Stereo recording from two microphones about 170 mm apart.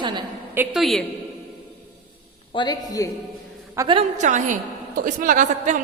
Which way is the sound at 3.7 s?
25° right (ahead or behind).